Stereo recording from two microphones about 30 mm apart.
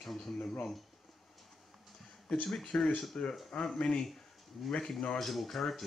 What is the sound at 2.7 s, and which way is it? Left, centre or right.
Speech, left.